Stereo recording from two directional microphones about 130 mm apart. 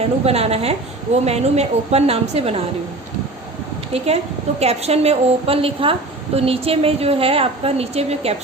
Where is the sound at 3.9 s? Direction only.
50° right (ahead or behind).